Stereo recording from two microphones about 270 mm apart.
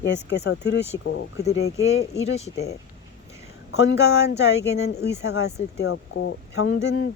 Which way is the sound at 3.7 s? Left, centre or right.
Left.